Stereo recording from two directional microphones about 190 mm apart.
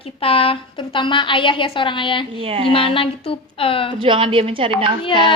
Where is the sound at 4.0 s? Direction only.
25° right (ahead or behind).